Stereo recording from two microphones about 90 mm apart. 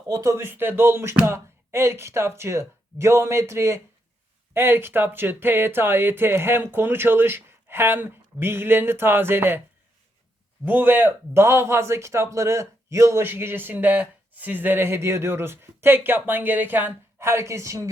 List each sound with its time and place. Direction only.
0.1 s a man's voice: 35° right (ahead or behind)
10.7 s a man's voice: 20° right (ahead or behind)